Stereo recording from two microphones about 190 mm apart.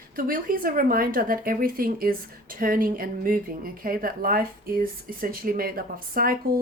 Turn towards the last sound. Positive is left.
turn(degrees=-50)  # may be behind; listen again after turning